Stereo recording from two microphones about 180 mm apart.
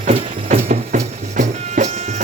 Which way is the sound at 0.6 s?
45° right (ahead or behind).